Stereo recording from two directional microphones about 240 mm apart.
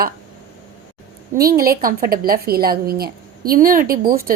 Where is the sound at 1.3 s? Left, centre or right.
Right.